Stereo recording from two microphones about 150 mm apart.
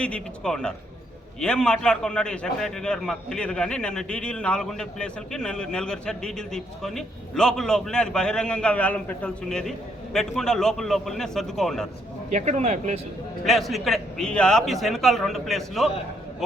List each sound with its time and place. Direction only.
0.0 s a man's voice: 5° left (ahead or behind)
12.3 s speech: 50° right (ahead or behind)
13.4 s a man's voice: centre (ahead or behind)